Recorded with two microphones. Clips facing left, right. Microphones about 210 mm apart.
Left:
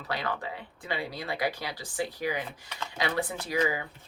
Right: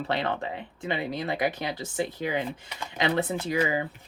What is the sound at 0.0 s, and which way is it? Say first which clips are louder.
Speech: right 5 dB; 25° right (ahead or behind).